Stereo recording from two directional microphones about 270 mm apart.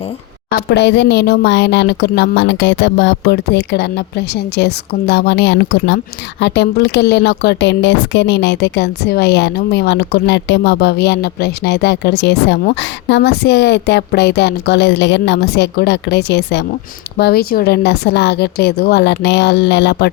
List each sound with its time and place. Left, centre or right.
0.5 s a woman's voice: left